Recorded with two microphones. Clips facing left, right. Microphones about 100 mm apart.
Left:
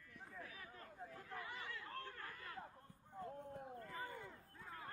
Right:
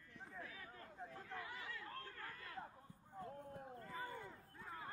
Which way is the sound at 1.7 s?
20° left (ahead or behind).